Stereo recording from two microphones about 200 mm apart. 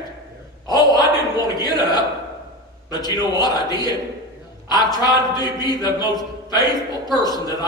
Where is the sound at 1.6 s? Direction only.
20° left (ahead or behind).